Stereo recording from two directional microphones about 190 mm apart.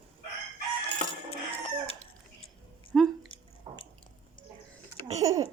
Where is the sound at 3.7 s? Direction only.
30° right (ahead or behind).